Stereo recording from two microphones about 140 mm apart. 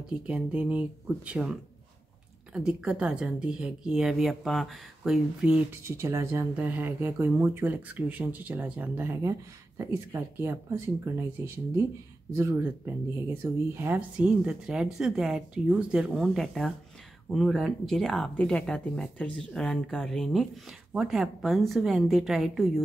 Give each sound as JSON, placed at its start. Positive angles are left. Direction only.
{"t": 0.3, "sound": "a woman's voice", "side_deg": -10}